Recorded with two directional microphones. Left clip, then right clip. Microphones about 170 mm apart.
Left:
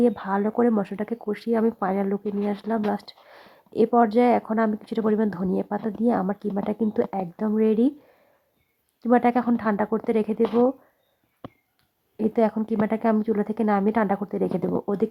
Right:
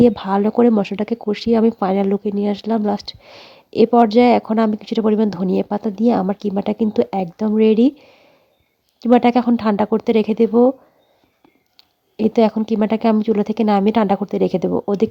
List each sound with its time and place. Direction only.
0.0 s speech: 40° right (ahead or behind)
9.0 s speech: 40° right (ahead or behind)
11.8 s a woman's voice: 40° right (ahead or behind)